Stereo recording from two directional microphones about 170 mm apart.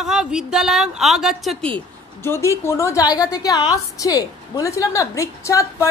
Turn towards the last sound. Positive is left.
turn(degrees=20)  # may be behind; listen again after turning